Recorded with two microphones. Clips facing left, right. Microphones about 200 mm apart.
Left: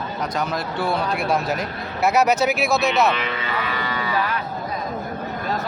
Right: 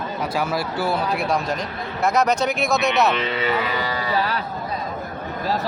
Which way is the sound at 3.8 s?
35° right (ahead or behind).